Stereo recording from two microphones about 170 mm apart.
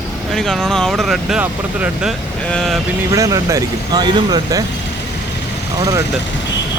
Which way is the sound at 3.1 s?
20° right (ahead or behind).